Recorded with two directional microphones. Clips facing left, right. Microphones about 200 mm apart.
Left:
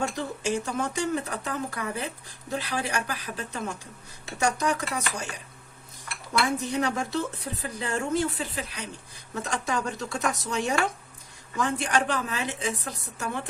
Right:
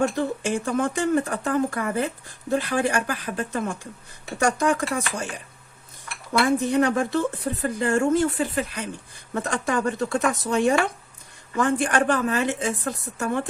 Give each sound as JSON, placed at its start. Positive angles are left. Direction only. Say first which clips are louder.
{"t": 0.0, "sound": "speech", "louder": "right 6 dB", "side_deg": -55}
{"t": 6.7, "sound": "speech", "louder": "right 7 dB", "side_deg": -55}